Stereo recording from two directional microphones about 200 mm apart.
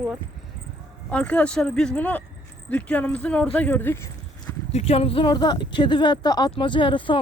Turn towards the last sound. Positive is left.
turn(degrees=25)  # may be behind; listen again after turning